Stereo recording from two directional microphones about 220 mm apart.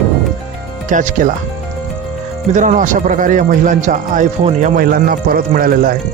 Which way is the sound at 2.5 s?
35° right (ahead or behind).